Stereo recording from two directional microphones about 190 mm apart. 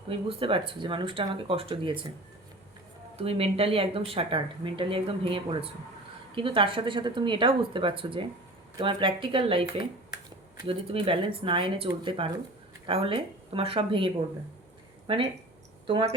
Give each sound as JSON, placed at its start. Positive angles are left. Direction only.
{"t": 0.1, "sound": "speech", "side_deg": -30}
{"t": 3.2, "sound": "speech", "side_deg": -30}